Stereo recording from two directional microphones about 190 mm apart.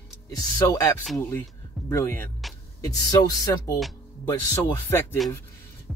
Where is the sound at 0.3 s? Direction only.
20° left (ahead or behind).